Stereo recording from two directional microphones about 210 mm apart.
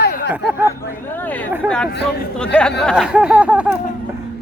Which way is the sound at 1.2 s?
5° left (ahead or behind).